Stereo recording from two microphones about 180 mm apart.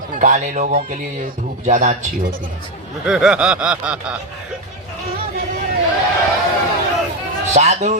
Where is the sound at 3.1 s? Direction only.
5° right (ahead or behind).